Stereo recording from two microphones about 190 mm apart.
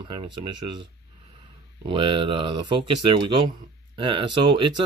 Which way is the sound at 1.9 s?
25° right (ahead or behind).